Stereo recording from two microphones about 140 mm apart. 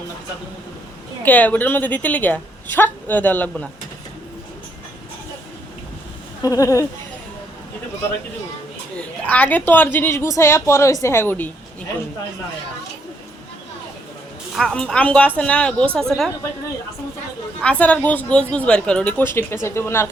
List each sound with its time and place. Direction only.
1.2 s a woman's voice: 10° left (ahead or behind)
6.4 s speech: 20° left (ahead or behind)
9.2 s a woman's voice: 10° left (ahead or behind)
14.5 s a woman's voice: 5° left (ahead or behind)
17.6 s a woman's voice: 10° left (ahead or behind)